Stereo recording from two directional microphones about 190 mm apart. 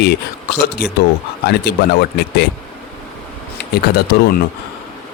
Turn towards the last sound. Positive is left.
turn(degrees=55)  # may be behind; listen again after turning